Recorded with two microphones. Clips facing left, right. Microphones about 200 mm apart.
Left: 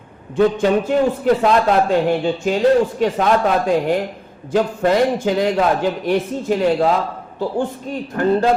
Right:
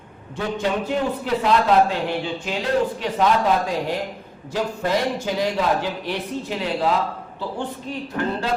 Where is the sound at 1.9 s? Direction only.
45° left (ahead or behind).